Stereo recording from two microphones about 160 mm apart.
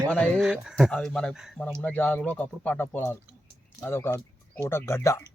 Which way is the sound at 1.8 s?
10° left (ahead or behind).